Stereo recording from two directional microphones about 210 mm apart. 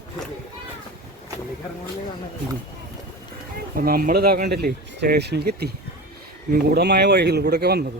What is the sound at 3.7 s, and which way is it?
Speech, 45° right (ahead or behind).